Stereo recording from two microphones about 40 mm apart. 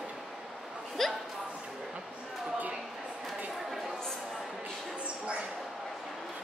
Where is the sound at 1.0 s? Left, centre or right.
Centre.